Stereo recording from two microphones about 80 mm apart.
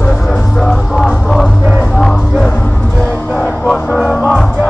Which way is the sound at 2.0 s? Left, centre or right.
Centre.